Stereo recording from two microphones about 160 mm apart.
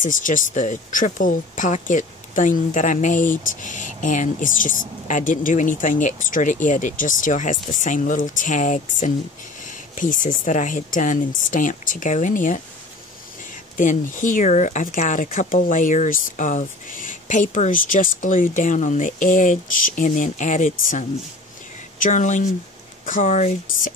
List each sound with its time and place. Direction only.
0.0 s speech: 55° left (ahead or behind)
13.7 s speech: 55° left (ahead or behind)